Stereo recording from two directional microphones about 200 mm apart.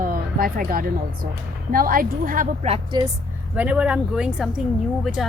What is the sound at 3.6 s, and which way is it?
Speech, 5° right (ahead or behind).